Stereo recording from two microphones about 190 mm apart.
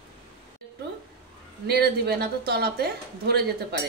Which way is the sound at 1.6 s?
55° right (ahead or behind).